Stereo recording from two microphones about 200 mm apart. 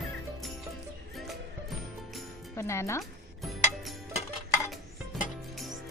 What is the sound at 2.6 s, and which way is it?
Speech, 15° left (ahead or behind).